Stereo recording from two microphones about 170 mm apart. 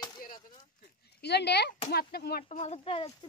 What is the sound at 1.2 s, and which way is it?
Speech, 75° left (ahead or behind).